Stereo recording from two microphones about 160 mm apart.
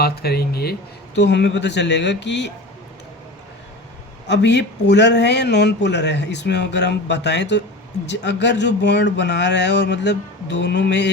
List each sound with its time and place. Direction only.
0.0 s speech: 80° left
4.3 s speech: 90° left